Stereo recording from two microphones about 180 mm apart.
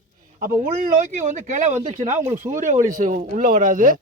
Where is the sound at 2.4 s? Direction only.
45° right (ahead or behind).